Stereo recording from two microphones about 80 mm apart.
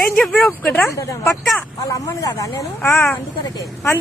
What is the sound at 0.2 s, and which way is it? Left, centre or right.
Speech, centre.